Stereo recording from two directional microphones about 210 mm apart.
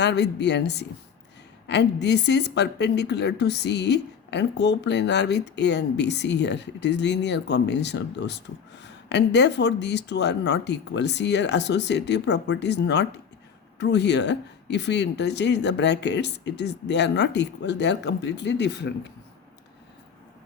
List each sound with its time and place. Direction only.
0.0 s a woman's voice: 55° left (ahead or behind)